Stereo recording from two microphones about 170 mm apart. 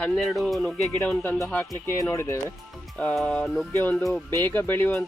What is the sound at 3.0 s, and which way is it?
Speech, 5° left (ahead or behind).